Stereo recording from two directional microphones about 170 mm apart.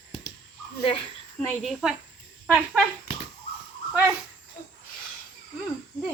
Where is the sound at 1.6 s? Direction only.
5° right (ahead or behind).